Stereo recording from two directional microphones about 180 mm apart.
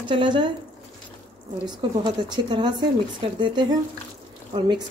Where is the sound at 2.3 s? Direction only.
25° right (ahead or behind).